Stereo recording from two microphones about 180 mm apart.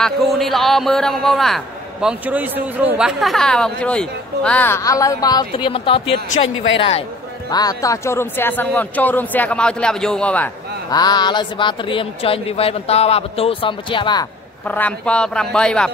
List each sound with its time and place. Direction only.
0.0 s a man's voice: centre (ahead or behind); by 6.2 s 30° left (ahead or behind)
6.4 s speech: 90° left
6.8 s speech: 30° left (ahead or behind)
7.4 s speech: 20° left (ahead or behind)
10.9 s speech: 20° left (ahead or behind)
14.7 s a man's voice: 10° left (ahead or behind)